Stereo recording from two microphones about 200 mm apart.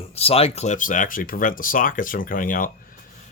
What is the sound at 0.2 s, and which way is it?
Speech, 30° left (ahead or behind).